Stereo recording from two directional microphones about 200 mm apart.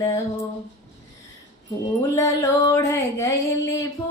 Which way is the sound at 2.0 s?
15° left (ahead or behind).